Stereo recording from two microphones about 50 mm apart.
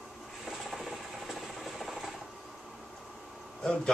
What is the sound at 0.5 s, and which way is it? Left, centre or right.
Ratchet, centre.